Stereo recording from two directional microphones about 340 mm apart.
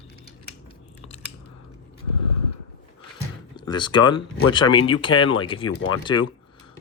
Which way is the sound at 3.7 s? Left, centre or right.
Centre.